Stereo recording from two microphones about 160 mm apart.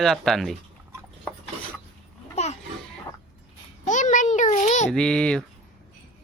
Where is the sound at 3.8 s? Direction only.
50° left (ahead or behind).